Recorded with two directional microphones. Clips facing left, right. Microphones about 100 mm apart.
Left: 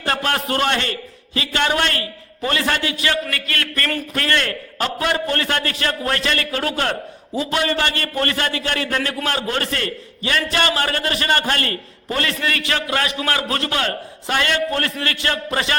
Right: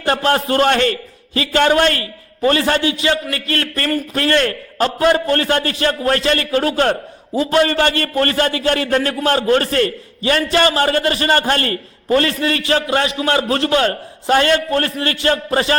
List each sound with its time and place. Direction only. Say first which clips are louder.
0.0 s a man's voice: right 5 dB; 30° right (ahead or behind)